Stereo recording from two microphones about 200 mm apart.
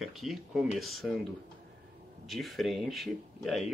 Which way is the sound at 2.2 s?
Centre (ahead or behind).